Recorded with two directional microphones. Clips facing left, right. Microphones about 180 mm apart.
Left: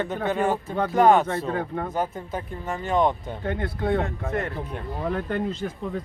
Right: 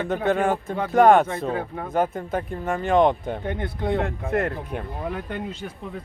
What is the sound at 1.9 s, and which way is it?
Speech, 50° right (ahead or behind).